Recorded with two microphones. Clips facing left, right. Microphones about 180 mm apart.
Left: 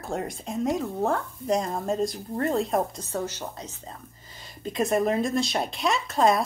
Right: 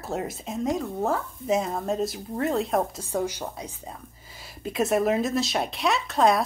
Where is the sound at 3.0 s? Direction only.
10° right (ahead or behind).